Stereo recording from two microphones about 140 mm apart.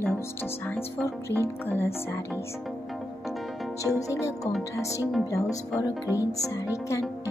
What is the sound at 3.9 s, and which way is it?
Speech, 20° left (ahead or behind).